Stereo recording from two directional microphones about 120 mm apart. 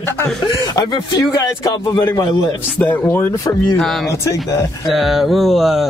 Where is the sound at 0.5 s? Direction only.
30° left (ahead or behind).